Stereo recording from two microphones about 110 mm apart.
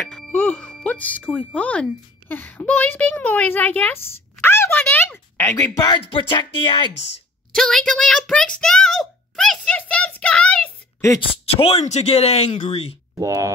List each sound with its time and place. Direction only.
0.0 s music: 5° left (ahead or behind)
0.3 s speech: 15° left (ahead or behind); by 5.9 s 35° left (ahead or behind)
6.0 s speech: 50° left (ahead or behind)
7.5 s a child's voice: 5° left (ahead or behind)
11.1 s speech: 60° left (ahead or behind); by 12.9 s 75° left (ahead or behind)
13.1 s speech: 30° right (ahead or behind)